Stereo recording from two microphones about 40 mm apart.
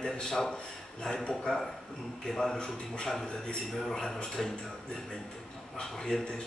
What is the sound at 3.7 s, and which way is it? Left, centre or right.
Speech, centre.